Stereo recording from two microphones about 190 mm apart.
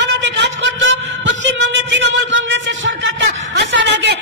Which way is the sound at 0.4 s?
75° right (ahead or behind).